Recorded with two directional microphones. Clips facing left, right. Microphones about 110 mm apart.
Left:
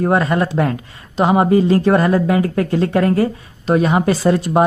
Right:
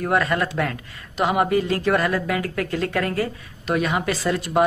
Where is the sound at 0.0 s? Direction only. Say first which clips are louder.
Left 5 dB; 30° left (ahead or behind).